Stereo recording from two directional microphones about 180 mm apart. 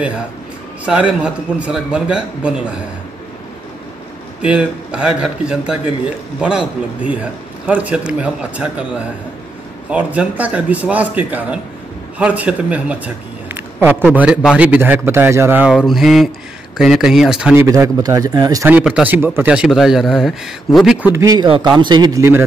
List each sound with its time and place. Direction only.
0.8 s a man's voice: 5° right (ahead or behind)
4.4 s a man's voice: 5° right (ahead or behind)
17.6 s a man's voice: 20° right (ahead or behind); by 21.1 s 5° right (ahead or behind)
21.1 s speech: 20° right (ahead or behind)